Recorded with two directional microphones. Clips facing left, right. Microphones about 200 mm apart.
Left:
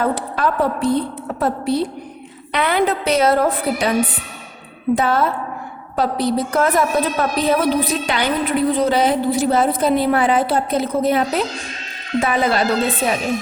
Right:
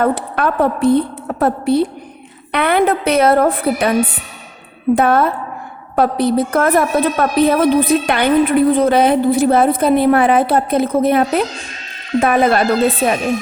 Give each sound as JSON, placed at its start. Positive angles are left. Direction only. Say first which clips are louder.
{"t": 0.0, "sound": "a woman's voice", "louder": "right 3 dB", "side_deg": -55}
{"t": 4.9, "sound": "a woman's voice", "louder": "right 4 dB", "side_deg": -55}